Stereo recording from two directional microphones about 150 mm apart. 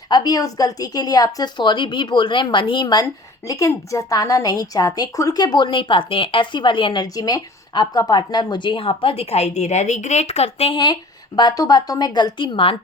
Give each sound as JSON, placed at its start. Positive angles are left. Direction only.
{"t": 0.1, "sound": "a woman's voice", "side_deg": 25}